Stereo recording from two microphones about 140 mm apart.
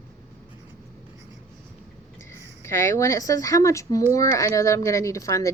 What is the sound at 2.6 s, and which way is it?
Speech, 20° left (ahead or behind).